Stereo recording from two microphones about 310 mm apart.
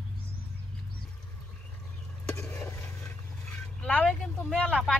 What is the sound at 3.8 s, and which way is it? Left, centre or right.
Speech, centre.